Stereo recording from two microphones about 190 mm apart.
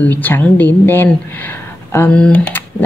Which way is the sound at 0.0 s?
10° left (ahead or behind).